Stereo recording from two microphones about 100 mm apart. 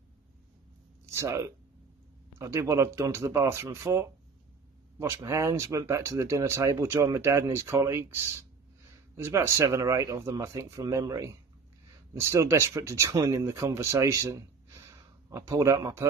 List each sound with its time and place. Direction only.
1.1 s speech: 30° right (ahead or behind)